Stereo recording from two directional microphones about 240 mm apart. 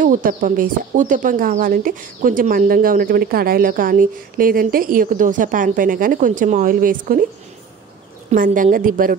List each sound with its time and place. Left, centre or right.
0.0 s speech: right
8.3 s speech: right